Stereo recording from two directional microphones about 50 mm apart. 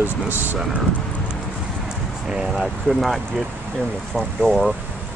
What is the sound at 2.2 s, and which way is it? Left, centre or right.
Speech, centre.